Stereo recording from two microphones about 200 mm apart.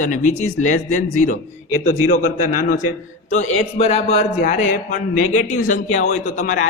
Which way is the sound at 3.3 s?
35° left (ahead or behind).